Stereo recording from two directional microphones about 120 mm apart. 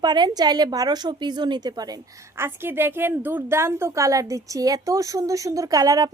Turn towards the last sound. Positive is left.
turn(degrees=-30)  # may be behind; listen again after turning